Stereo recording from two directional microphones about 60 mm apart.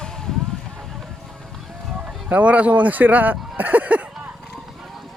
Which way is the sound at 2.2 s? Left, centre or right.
Right.